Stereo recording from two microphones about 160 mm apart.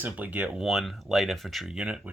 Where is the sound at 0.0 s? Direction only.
10° right (ahead or behind).